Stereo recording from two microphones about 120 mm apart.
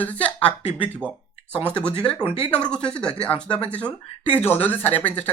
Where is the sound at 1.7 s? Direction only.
10° left (ahead or behind).